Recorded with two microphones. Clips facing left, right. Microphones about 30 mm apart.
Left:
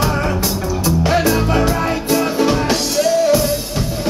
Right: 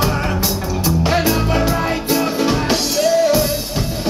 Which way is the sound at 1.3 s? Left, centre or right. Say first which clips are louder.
Left 1 dB; centre.